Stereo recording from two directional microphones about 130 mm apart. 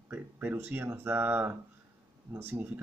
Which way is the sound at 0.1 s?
15° right (ahead or behind).